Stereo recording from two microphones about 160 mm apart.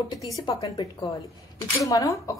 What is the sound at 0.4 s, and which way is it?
A woman's voice, 25° left (ahead or behind).